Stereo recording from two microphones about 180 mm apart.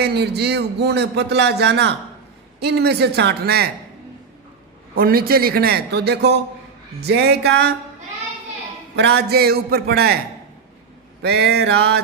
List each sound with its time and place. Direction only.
0.0 s speech: 65° right (ahead or behind)
4.9 s a man's voice: 55° right (ahead or behind)
9.0 s a man's voice: 65° right (ahead or behind)
11.2 s a man's voice: 65° right (ahead or behind)